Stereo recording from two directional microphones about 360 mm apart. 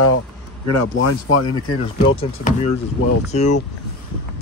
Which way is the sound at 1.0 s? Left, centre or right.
Left.